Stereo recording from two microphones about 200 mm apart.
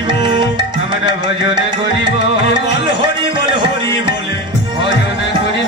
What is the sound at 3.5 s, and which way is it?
Music, 25° right (ahead or behind).